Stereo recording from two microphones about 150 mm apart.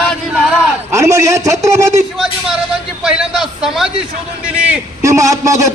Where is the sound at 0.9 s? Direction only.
20° right (ahead or behind).